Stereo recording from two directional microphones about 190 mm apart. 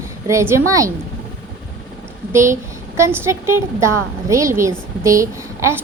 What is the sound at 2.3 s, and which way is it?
A woman's voice, 15° right (ahead or behind).